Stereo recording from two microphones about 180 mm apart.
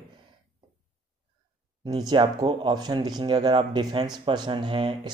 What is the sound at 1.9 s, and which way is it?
Speech, 20° right (ahead or behind).